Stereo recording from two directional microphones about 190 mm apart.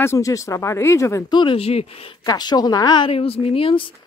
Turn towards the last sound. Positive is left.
turn(degrees=30)  # may be behind; listen again after turning